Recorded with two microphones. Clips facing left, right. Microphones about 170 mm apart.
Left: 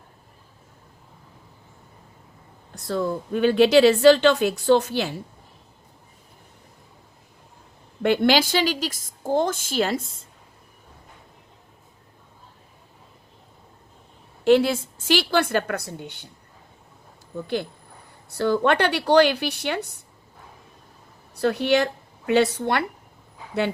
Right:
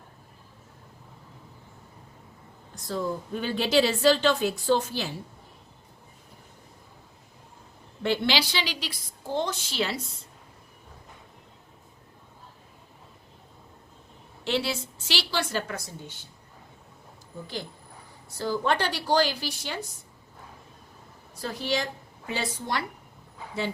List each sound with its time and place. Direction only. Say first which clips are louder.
2.7 s speech: left 5 dB; 65° left (ahead or behind)
8.0 s a woman's voice: left 7 dB; 50° left (ahead or behind)
14.4 s a woman's voice: left 11 dB; 50° left (ahead or behind)
17.4 s a woman's voice: left 9 dB; 60° left (ahead or behind)
21.3 s a woman's voice: left 9 dB; 70° left (ahead or behind)